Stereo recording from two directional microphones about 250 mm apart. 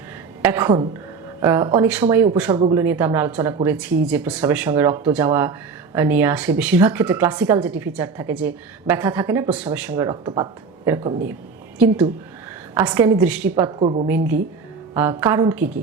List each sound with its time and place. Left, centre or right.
0.4 s speech: centre
2.6 s a woman's voice: right
2.8 s speech: centre
12.7 s speech: centre
13.7 s a woman's voice: right
14.9 s speech: centre